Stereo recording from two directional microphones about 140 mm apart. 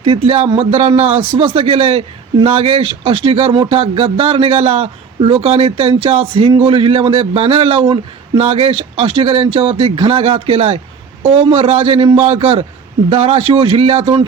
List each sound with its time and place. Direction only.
0.0 s a man's voice: 45° right (ahead or behind)